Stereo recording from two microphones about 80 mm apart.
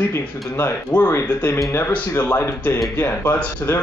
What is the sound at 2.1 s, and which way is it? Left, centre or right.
Speech, left.